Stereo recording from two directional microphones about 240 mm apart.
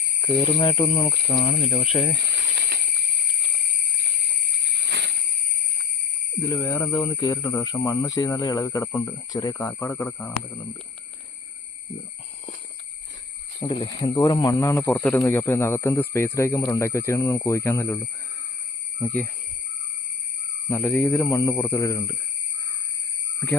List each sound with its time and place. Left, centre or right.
0.2 s speech: centre
1.5 s speech: left
2.3 s a sound: right
4.6 s cricket: right
6.4 s speech: centre
13.6 s speech: centre
20.7 s speech: centre